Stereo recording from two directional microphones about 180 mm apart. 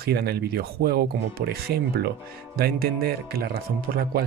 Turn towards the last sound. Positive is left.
turn(degrees=-60)  # may be behind; listen again after turning